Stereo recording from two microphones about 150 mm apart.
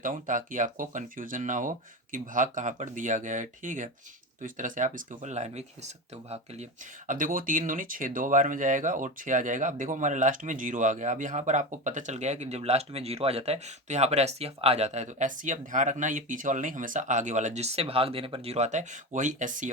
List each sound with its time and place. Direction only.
0.0 s speech: 60° right (ahead or behind)
7.1 s speech: 65° right (ahead or behind)